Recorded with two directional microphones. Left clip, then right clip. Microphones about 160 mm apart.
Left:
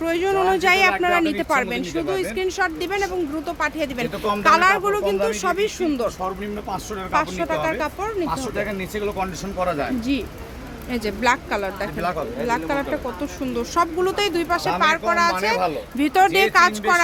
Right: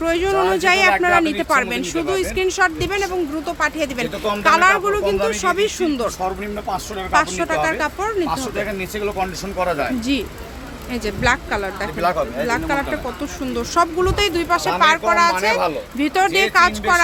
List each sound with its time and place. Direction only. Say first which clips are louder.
0.0 s speech: right 2 dB; centre (ahead or behind)
2.0 s speech: right 4 dB; 10° right (ahead or behind)
7.1 s speech: right 4 dB; 10° right (ahead or behind)
10.9 s speech: right 1 dB; 5° left (ahead or behind)